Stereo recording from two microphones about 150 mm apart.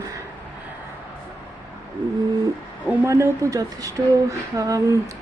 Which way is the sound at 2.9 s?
15° right (ahead or behind).